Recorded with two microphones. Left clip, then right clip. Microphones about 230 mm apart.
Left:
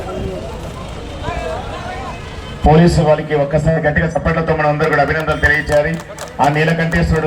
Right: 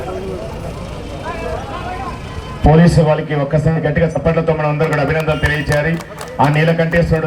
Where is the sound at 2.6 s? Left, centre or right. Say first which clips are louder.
Left 1 dB; right.